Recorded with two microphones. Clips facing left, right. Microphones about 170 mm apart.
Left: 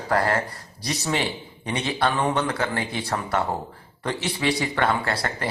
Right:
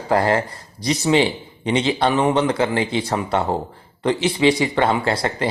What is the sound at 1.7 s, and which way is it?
Speech, 25° right (ahead or behind).